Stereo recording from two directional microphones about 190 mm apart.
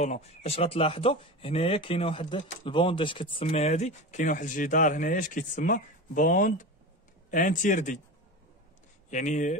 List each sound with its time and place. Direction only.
0.0 s a man's voice: 35° left (ahead or behind)
9.1 s speech: 40° left (ahead or behind)